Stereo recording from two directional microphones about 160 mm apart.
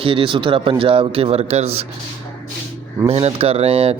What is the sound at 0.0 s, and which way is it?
Speech, 35° right (ahead or behind).